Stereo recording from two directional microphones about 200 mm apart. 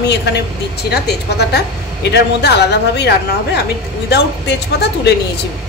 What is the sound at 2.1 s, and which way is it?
Speech, 60° left (ahead or behind).